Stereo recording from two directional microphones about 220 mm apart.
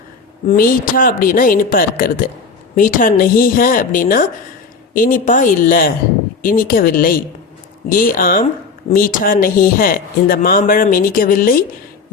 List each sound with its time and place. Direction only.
0.4 s speech: 40° left (ahead or behind)